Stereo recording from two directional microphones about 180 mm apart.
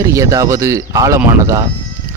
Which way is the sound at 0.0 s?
15° right (ahead or behind).